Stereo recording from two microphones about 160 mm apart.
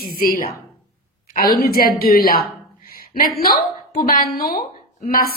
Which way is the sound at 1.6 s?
70° left (ahead or behind).